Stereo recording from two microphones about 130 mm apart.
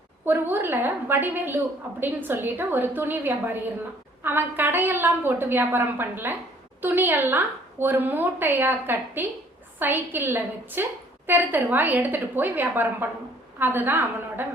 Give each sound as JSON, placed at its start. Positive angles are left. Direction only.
{"t": 0.3, "sound": "a woman's voice", "side_deg": -15}